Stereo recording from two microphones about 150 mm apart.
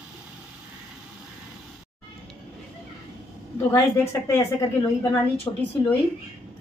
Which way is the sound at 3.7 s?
15° left (ahead or behind).